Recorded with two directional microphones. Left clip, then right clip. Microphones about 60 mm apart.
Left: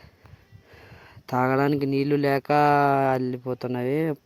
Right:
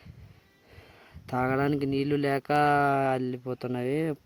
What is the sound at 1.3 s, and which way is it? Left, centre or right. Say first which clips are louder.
Speech: left 5 dB; left.